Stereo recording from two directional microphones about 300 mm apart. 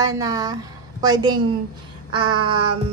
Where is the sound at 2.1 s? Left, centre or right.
Centre.